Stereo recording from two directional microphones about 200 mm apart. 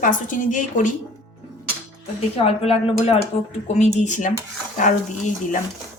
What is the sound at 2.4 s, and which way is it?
A woman's voice, 30° left (ahead or behind).